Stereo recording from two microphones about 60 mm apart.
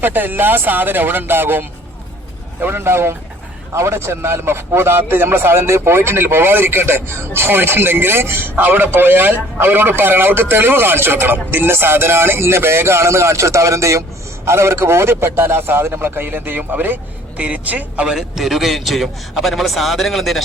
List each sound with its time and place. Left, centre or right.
0.0 s speech: right
18.0 s a man's voice: centre